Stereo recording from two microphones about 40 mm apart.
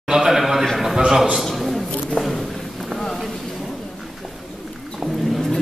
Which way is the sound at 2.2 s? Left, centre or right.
Left.